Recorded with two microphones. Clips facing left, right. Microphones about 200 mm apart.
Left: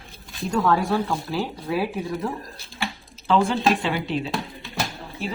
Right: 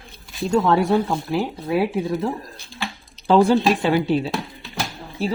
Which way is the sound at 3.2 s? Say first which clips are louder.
Right 5 dB; 40° right (ahead or behind).